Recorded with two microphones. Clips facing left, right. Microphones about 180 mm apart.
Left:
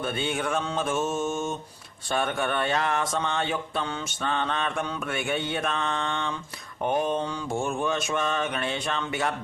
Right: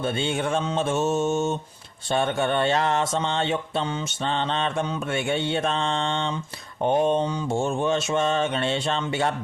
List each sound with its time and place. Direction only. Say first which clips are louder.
0.0 s mantra: right 3 dB; 25° right (ahead or behind)